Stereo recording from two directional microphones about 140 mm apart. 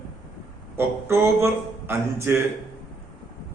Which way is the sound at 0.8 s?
20° right (ahead or behind).